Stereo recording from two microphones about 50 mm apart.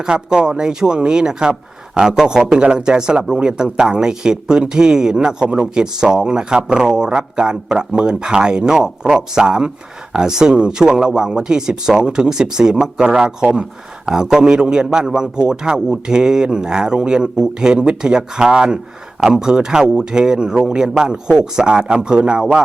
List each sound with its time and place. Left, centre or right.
0.0 s speech: centre